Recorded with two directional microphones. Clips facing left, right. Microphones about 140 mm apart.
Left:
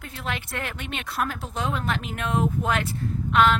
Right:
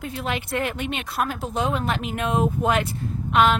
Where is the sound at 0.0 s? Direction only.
15° right (ahead or behind).